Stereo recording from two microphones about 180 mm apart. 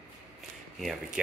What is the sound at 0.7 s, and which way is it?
Speech, centre (ahead or behind).